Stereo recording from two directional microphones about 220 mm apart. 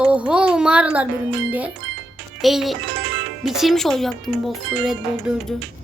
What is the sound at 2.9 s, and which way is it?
Music, 50° right (ahead or behind).